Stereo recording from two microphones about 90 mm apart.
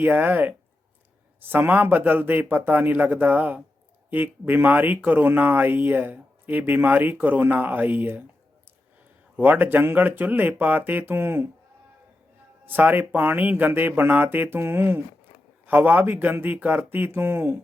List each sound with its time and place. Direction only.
0.0 s speech: 20° right (ahead or behind)
9.3 s speech: 20° right (ahead or behind)
12.6 s speech: 20° right (ahead or behind)